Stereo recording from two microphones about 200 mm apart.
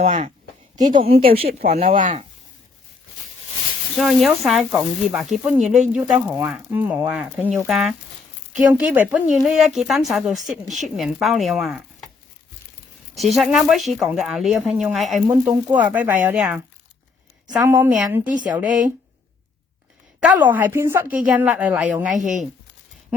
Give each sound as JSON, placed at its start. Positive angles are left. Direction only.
{"t": 0.0, "sound": "speech", "side_deg": -35}
{"t": 0.9, "sound": "speech", "side_deg": -25}
{"t": 3.9, "sound": "a woman's voice", "side_deg": 0}
{"t": 13.1, "sound": "a woman's voice", "side_deg": 0}
{"t": 17.6, "sound": "a woman's voice", "side_deg": -10}
{"t": 20.1, "sound": "a woman's voice", "side_deg": -10}